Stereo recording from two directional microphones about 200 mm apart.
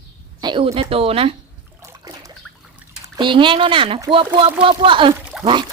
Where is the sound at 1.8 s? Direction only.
15° right (ahead or behind).